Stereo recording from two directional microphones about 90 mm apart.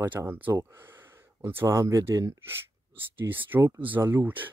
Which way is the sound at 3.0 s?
25° right (ahead or behind).